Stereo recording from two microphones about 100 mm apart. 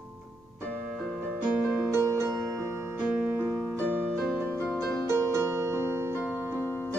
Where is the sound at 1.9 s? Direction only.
25° right (ahead or behind).